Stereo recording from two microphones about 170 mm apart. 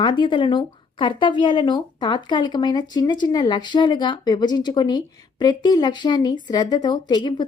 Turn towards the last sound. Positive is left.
turn(degrees=25)  # may be behind; listen again after turning